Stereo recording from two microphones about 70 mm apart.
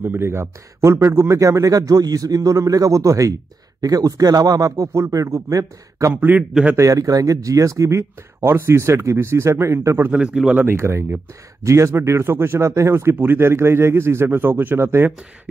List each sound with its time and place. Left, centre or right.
0.0 s speech: right
1.4 s speech: right
3.8 s speech: right
10.1 s speech: centre
10.6 s speech: right